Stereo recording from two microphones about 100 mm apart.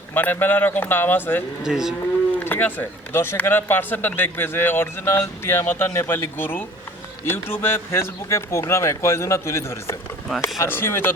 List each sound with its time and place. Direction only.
0.1 s speech: 20° left (ahead or behind)
1.6 s livestock: 5° right (ahead or behind)
2.4 s speech: 20° left (ahead or behind)